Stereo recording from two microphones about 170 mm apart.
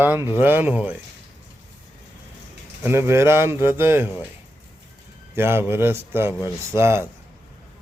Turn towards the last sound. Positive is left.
turn(degrees=-15)  # may be behind; listen again after turning